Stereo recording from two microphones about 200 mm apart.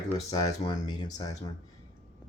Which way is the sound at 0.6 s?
20° left (ahead or behind).